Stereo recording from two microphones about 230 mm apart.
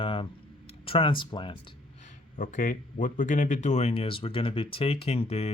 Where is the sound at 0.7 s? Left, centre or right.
Left.